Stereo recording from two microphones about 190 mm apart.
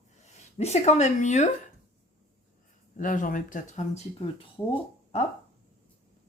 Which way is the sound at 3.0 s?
45° left (ahead or behind).